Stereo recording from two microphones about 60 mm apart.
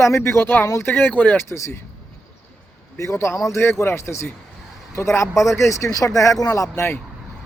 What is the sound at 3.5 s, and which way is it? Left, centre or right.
Speech, left.